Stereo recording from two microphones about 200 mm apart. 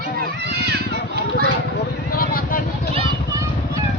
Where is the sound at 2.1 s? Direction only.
50° left (ahead or behind).